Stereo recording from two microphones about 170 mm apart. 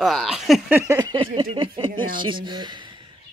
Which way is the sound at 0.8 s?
20° right (ahead or behind).